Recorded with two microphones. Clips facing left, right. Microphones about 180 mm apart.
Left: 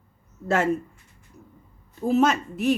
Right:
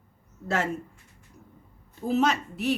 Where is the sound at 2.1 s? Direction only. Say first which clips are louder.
Left 4 dB; 50° left (ahead or behind).